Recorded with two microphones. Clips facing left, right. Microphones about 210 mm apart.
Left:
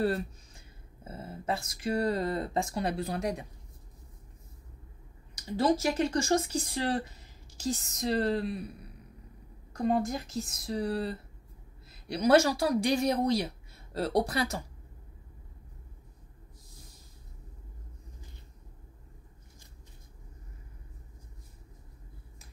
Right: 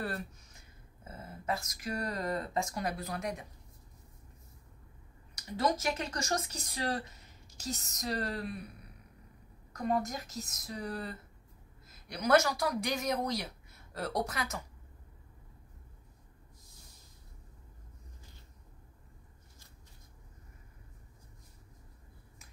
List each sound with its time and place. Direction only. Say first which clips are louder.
0.0 s speech: left 9 dB; 30° left (ahead or behind)
5.6 s speech: left 6 dB; 30° left (ahead or behind)
9.7 s a woman's voice: left 4 dB; 30° left (ahead or behind)